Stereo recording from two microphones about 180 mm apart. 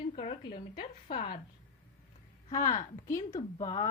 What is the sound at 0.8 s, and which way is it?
Speech, 50° left (ahead or behind).